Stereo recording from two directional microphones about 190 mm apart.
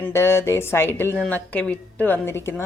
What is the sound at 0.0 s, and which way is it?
A woman's voice, 15° left (ahead or behind).